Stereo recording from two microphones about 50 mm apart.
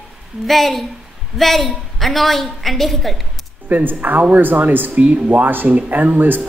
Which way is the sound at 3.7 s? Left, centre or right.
Right.